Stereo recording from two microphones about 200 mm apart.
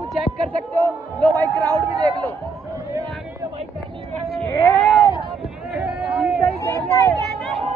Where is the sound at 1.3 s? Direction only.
15° right (ahead or behind).